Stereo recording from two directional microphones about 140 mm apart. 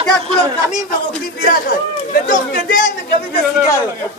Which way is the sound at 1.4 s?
70° left (ahead or behind).